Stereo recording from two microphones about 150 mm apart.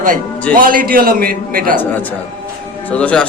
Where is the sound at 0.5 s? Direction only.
70° right (ahead or behind).